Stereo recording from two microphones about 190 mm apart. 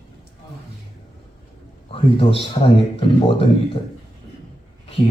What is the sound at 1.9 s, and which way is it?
Speech, 30° left (ahead or behind).